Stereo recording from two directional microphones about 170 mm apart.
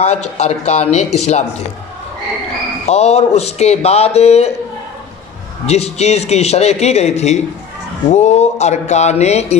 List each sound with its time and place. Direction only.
0.0 s a man's voice: 40° left (ahead or behind)
2.9 s a man's voice: 40° left (ahead or behind)
5.7 s a man's voice: 40° left (ahead or behind)